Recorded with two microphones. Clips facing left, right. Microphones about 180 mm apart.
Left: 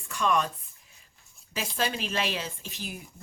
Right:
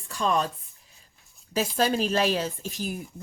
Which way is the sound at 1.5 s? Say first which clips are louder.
Right 7 dB; 40° right (ahead or behind).